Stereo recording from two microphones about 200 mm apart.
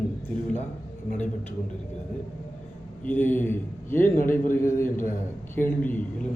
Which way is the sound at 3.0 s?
10° left (ahead or behind).